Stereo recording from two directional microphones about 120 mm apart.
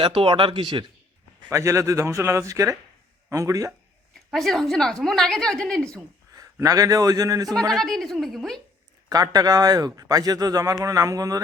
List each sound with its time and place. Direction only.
0.0 s speech: 45° right (ahead or behind)
1.5 s a man's voice: 25° right (ahead or behind)
4.1 s a woman's voice: centre (ahead or behind)
6.3 s a man's voice: 30° right (ahead or behind)
7.7 s a woman's voice: centre (ahead or behind)
9.0 s speech: 30° right (ahead or behind)